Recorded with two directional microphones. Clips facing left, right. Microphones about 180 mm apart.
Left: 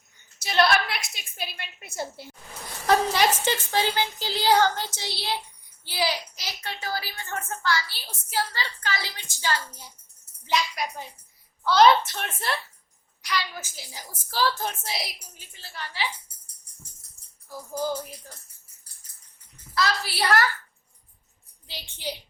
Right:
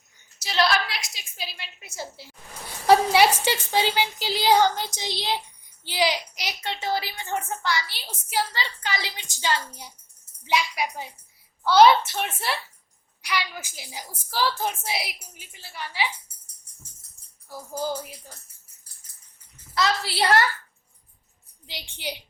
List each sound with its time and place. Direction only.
0.3 s a woman's voice: 55° left (ahead or behind)
2.8 s a woman's voice: 10° right (ahead or behind)
19.7 s a woman's voice: 25° right (ahead or behind)
21.7 s a woman's voice: 15° right (ahead or behind)